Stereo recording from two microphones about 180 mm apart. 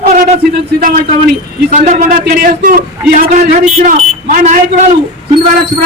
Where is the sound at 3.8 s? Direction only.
45° right (ahead or behind).